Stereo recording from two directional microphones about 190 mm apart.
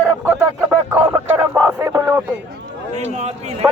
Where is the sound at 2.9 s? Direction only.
35° right (ahead or behind).